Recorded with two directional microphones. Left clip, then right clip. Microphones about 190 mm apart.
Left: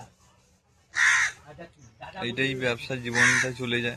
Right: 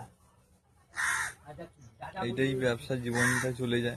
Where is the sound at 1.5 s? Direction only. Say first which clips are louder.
Left 1 dB; 30° left (ahead or behind).